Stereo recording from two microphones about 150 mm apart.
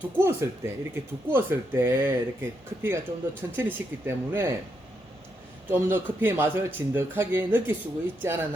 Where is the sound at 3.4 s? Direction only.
20° right (ahead or behind).